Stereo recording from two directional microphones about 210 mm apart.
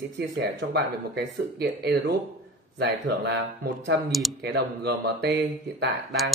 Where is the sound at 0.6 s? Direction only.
50° right (ahead or behind).